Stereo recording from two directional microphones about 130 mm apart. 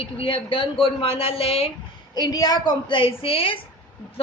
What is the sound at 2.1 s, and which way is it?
A woman's voice, 30° left (ahead or behind).